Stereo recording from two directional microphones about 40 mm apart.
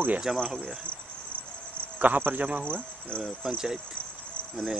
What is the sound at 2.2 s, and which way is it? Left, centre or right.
Speech, right.